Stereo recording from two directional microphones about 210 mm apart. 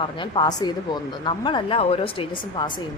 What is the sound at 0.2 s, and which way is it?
A woman's voice, 20° left (ahead or behind).